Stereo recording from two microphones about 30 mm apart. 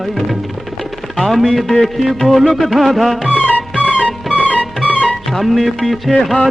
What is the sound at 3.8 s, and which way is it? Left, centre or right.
Music, left.